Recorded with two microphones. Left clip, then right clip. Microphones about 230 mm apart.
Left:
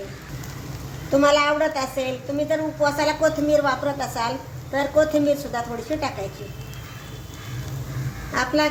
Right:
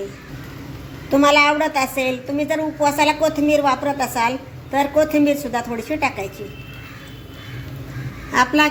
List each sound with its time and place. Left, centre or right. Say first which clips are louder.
1.2 s a woman's voice: right 4 dB; centre
8.3 s a woman's voice: right 5 dB; centre